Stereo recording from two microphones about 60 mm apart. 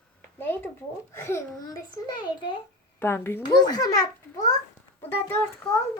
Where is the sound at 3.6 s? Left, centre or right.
Left.